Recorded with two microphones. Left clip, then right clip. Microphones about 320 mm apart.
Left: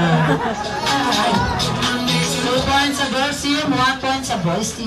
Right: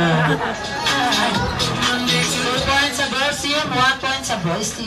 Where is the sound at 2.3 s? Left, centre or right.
Left.